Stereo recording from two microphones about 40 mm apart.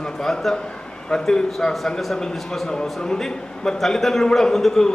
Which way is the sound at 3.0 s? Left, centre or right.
Centre.